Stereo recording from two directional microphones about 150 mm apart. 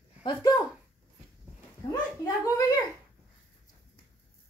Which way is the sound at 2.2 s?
20° left (ahead or behind).